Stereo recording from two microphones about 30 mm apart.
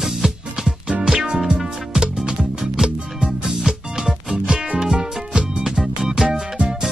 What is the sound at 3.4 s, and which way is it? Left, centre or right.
Music, centre.